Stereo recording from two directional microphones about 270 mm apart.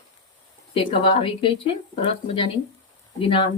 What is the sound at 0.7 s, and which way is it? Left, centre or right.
A woman's voice, centre.